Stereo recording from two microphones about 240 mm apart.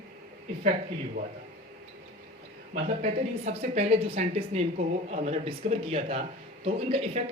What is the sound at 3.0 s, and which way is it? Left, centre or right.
A woman's voice, right.